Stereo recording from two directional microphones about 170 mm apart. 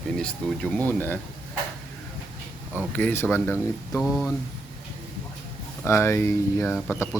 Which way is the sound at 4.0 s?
Centre (ahead or behind).